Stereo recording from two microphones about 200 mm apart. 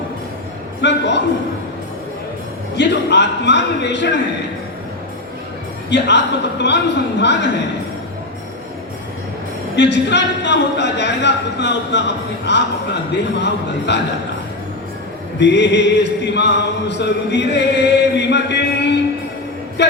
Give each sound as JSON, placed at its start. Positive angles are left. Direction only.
{"t": 0.8, "sound": "speech", "side_deg": 60}
{"t": 2.7, "sound": "speech", "side_deg": 60}
{"t": 5.9, "sound": "speech", "side_deg": 60}
{"t": 9.7, "sound": "speech", "side_deg": 60}
{"t": 15.4, "sound": "speech", "side_deg": 60}